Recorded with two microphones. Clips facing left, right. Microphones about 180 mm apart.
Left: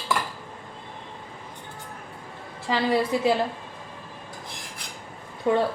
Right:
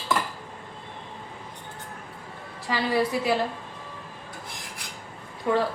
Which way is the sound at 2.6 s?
20° left (ahead or behind).